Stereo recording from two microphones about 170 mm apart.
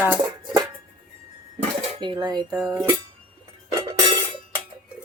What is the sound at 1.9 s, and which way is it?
Speech, 25° right (ahead or behind).